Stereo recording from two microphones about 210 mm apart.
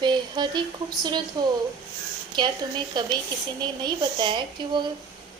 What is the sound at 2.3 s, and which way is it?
A woman's voice, 20° right (ahead or behind).